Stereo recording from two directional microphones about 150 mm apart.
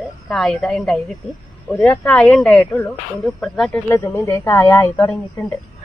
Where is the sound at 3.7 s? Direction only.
20° left (ahead or behind).